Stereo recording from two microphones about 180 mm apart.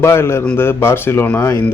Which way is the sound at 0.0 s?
15° left (ahead or behind).